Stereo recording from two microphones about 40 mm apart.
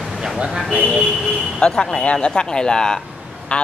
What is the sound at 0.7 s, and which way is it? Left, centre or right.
Speech, centre.